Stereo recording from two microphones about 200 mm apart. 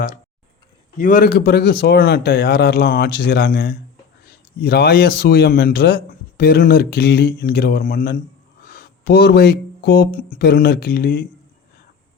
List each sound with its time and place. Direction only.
0.9 s a man's voice: 40° left (ahead or behind)